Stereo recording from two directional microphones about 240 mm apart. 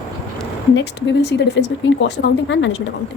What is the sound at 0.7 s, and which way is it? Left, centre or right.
A woman's voice, left.